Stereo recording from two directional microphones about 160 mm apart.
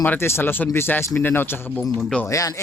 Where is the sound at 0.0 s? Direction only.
10° left (ahead or behind).